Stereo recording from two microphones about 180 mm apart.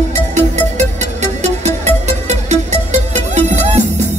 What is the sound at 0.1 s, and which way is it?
Music, 40° right (ahead or behind).